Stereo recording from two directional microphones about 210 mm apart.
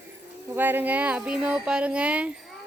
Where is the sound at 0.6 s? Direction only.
10° right (ahead or behind).